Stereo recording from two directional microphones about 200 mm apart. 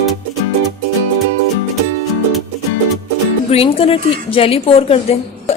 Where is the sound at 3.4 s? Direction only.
30° left (ahead or behind).